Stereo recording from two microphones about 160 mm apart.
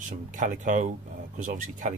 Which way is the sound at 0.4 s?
55° right (ahead or behind).